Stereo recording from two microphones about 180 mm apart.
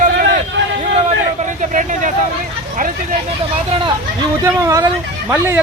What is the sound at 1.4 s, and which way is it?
Vehicle, 45° right (ahead or behind).